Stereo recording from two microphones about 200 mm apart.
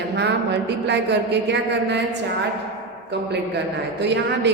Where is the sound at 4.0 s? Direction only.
60° right (ahead or behind).